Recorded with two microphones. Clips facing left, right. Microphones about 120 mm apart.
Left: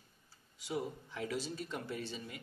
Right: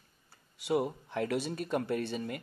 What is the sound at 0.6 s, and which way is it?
Speech, 65° right (ahead or behind).